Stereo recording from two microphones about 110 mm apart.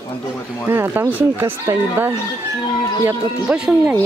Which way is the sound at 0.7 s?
20° right (ahead or behind).